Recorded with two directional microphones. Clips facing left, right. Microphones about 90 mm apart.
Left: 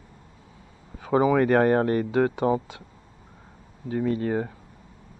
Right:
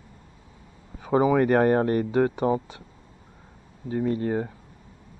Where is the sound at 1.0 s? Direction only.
20° right (ahead or behind).